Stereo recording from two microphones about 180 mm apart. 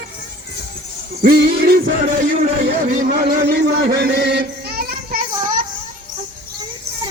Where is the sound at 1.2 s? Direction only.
60° right (ahead or behind).